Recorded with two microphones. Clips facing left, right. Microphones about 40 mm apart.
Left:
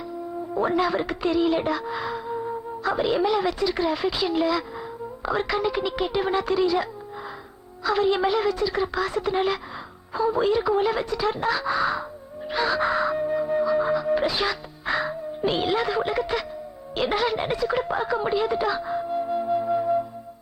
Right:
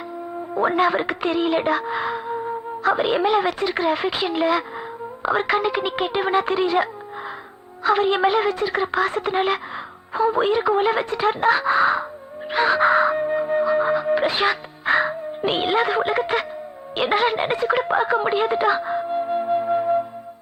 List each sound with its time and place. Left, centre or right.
0.5 s a woman's voice: right
7.9 s a woman's voice: right
12.5 s music: right
17.0 s speech: right